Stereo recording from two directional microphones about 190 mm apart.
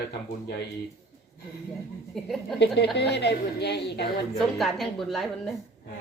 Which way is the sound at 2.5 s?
65° left (ahead or behind).